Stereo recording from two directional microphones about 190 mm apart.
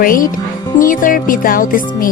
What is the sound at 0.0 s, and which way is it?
A woman's voice, 50° left (ahead or behind).